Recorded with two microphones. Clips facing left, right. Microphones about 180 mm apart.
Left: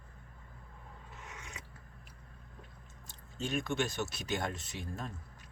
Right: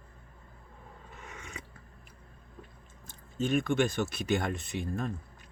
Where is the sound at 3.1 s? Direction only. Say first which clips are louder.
Right 8 dB; 55° right (ahead or behind).